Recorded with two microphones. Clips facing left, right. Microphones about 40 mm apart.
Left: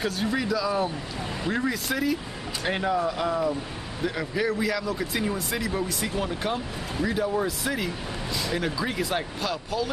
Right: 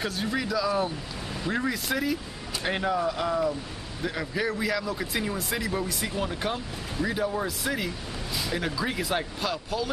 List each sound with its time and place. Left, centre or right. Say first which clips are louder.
0.0 s speech: left 2 dB; centre